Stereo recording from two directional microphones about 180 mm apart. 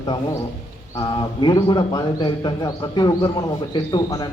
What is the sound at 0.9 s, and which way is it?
A man's voice, 25° left (ahead or behind).